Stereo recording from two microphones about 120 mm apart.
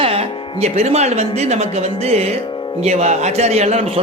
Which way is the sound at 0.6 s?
65° right (ahead or behind).